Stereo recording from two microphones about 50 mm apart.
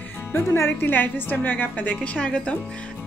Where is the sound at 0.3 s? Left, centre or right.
Left.